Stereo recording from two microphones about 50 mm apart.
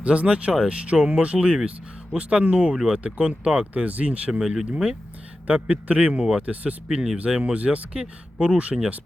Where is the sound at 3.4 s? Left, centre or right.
Right.